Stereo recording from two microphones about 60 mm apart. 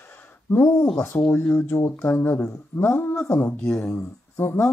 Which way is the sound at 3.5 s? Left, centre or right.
Left.